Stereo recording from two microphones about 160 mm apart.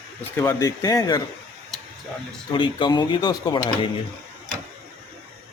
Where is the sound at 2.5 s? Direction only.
30° left (ahead or behind).